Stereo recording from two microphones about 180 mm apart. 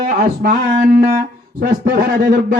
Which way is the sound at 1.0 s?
50° right (ahead or behind).